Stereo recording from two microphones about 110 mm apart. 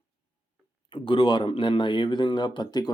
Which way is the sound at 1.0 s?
50° left (ahead or behind).